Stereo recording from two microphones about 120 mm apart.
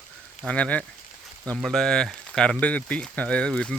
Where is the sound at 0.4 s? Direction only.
10° left (ahead or behind).